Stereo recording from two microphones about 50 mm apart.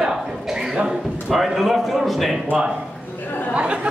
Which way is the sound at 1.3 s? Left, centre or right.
Centre.